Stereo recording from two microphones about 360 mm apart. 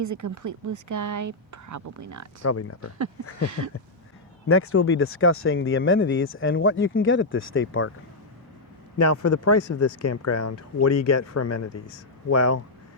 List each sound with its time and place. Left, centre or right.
0.0 s speech: right
2.4 s speech: left
4.4 s speech: left
9.0 s speech: left